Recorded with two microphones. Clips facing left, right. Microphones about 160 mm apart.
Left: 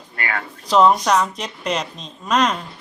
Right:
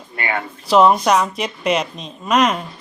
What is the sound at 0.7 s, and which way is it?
Speech, 10° right (ahead or behind).